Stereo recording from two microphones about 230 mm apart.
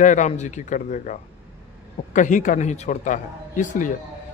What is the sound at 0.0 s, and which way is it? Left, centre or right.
Speech, left.